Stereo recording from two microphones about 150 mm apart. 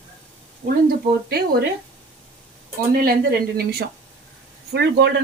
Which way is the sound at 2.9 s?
85° right.